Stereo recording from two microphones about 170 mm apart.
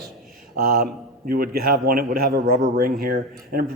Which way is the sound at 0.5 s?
60° right (ahead or behind).